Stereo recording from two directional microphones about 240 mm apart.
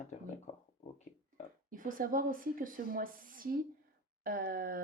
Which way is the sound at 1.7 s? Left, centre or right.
Right.